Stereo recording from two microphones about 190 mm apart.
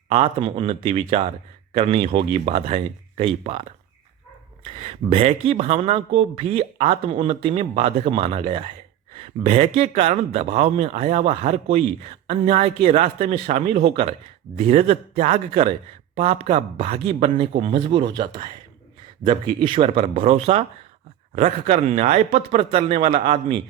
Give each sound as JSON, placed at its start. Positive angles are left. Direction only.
{"t": 0.1, "sound": "speech", "side_deg": -30}